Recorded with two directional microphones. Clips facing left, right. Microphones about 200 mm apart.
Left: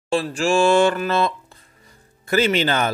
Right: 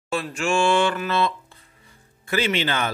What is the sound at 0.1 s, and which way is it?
A man's voice, 35° left (ahead or behind).